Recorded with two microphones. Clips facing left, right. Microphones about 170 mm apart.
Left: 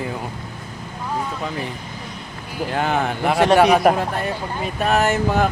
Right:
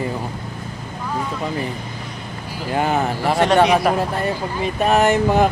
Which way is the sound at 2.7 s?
5° right (ahead or behind).